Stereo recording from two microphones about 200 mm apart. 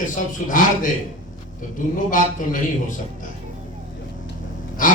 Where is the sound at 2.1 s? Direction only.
40° left (ahead or behind).